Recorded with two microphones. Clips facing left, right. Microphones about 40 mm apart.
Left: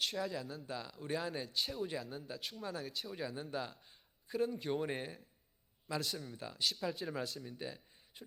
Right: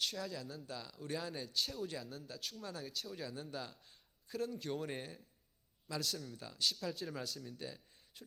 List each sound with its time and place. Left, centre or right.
0.0 s a man's voice: centre